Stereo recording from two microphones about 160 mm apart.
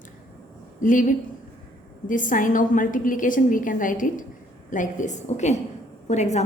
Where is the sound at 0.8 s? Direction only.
55° left (ahead or behind).